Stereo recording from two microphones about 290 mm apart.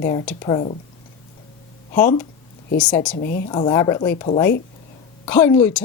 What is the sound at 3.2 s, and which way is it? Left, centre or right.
Speech, left.